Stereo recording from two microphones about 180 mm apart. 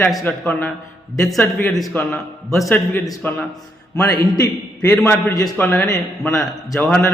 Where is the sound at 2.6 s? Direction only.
15° left (ahead or behind).